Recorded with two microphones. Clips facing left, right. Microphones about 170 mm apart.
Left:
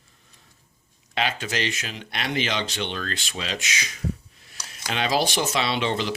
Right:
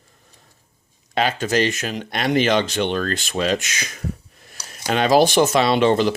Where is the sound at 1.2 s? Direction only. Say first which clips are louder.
Right 8 dB; 45° right (ahead or behind).